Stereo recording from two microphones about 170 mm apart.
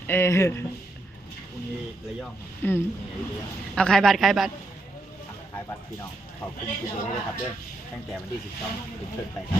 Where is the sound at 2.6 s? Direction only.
10° left (ahead or behind).